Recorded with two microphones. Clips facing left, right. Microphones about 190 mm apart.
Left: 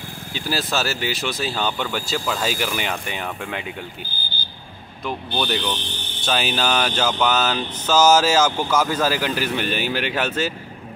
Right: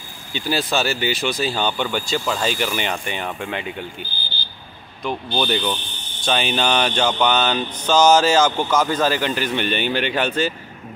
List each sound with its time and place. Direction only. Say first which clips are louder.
0.3 s speech: right 3 dB; centre (ahead or behind)
5.0 s speech: right 2 dB; centre (ahead or behind)
5.8 s speech: left 5 dB; 85° left
6.2 s speech: right 2 dB; centre (ahead or behind)